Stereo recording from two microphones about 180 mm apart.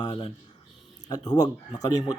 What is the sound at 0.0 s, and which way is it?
Speech, 30° left (ahead or behind).